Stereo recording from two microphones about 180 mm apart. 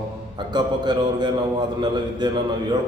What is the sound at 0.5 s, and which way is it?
A man's voice, 25° right (ahead or behind).